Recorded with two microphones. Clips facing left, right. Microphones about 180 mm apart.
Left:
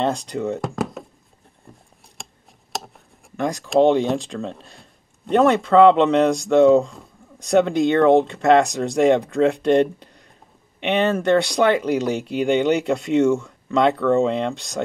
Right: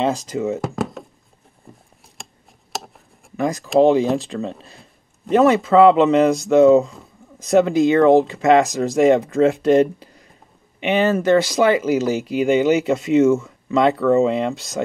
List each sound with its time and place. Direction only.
0.0 s speech: centre (ahead or behind)
1.7 s a sound: centre (ahead or behind)
2.7 s speech: centre (ahead or behind)